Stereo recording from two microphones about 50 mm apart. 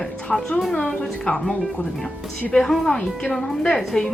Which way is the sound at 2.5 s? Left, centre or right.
Centre.